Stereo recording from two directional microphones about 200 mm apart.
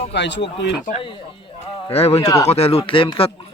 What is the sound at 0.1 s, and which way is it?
Speech, 60° left (ahead or behind).